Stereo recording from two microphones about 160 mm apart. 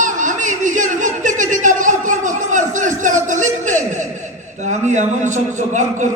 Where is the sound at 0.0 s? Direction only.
50° right (ahead or behind).